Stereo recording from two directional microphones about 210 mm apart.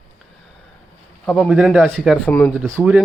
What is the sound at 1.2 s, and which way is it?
Speech, centre (ahead or behind).